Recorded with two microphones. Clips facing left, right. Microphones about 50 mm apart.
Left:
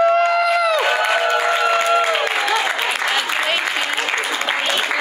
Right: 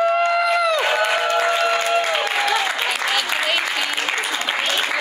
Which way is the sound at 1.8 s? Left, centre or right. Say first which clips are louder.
Left 3 dB; centre.